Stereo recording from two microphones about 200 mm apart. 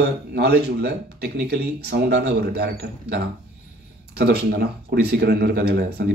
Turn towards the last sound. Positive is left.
turn(degrees=-50)  # may be behind; listen again after turning